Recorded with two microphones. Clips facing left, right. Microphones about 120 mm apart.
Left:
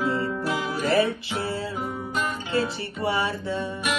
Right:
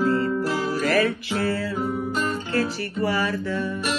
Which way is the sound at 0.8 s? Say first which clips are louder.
Left 1 dB; 20° left (ahead or behind).